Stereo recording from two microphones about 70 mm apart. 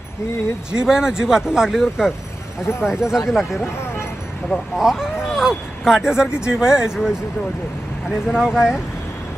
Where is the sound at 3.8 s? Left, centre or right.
Left.